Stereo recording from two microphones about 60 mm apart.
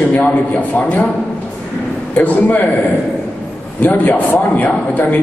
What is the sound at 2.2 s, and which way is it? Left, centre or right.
Speech, left.